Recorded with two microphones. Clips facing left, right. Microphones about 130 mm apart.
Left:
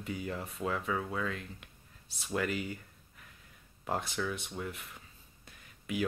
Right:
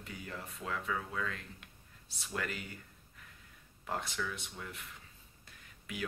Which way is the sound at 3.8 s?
25° left (ahead or behind).